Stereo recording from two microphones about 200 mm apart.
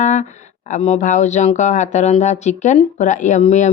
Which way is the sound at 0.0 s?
35° left (ahead or behind).